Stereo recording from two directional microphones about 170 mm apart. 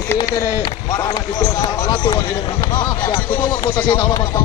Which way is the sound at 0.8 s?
20° left (ahead or behind).